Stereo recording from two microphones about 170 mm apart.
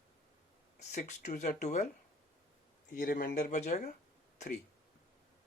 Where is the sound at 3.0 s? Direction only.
60° left (ahead or behind); by 3.9 s 40° left (ahead or behind).